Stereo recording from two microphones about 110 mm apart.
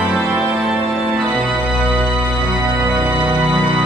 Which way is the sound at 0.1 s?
5° right (ahead or behind).